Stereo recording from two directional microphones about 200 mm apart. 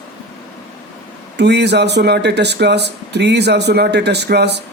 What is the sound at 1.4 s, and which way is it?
Speech, 60° right (ahead or behind).